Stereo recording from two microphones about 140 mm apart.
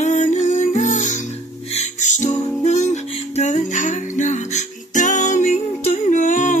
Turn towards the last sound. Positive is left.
turn(degrees=60)  # may be behind; listen again after turning